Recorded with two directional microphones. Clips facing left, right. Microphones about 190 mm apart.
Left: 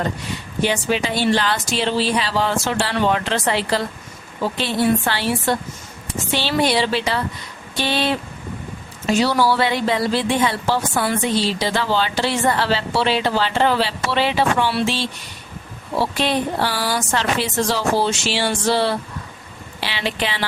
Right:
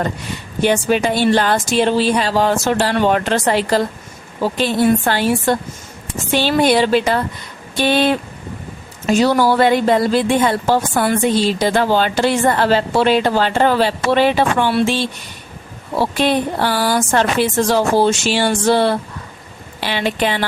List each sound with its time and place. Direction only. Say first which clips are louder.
0.6 s a woman's voice: right 5 dB; 50° right (ahead or behind)